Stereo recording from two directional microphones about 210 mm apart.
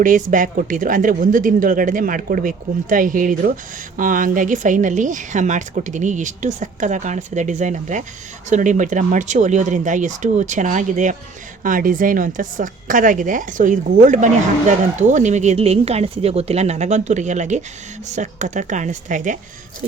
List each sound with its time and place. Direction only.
0.0 s a woman's voice: 40° right (ahead or behind)